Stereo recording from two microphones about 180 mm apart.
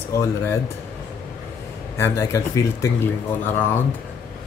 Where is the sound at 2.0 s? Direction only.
15° left (ahead or behind).